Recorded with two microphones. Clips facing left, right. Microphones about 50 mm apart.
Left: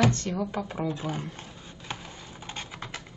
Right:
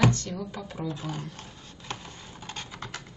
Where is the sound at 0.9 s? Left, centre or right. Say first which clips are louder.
Left 3 dB; left.